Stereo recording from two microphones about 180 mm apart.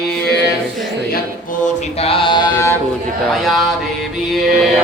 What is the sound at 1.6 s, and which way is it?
Mantra, 35° left (ahead or behind).